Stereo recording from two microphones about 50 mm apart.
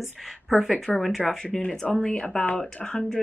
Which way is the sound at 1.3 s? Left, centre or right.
Centre.